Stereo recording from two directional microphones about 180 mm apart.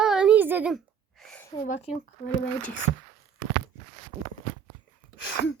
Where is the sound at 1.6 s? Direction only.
35° left (ahead or behind).